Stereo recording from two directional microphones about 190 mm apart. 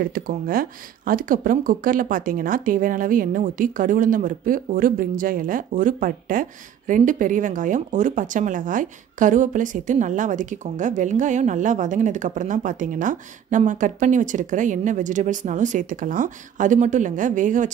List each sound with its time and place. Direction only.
0.0 s speech: 50° right (ahead or behind)